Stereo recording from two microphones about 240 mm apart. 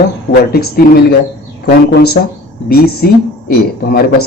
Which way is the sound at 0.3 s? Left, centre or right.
Left.